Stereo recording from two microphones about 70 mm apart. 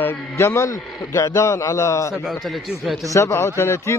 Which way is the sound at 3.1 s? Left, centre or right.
Left.